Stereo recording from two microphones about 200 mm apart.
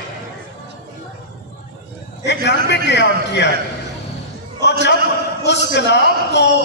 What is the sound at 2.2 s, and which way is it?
Speech, 60° left (ahead or behind).